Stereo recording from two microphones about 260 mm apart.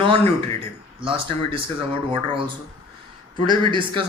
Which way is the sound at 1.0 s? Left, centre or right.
Right.